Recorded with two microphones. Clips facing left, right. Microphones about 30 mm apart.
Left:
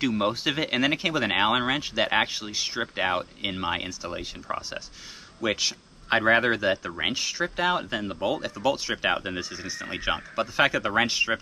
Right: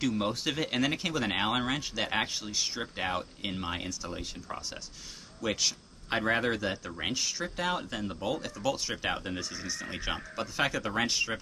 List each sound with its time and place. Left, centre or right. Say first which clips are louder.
0.0 s speech: left 5 dB; left
9.6 s speech: left 4 dB; centre